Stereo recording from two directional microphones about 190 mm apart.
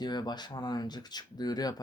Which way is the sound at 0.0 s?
20° left (ahead or behind).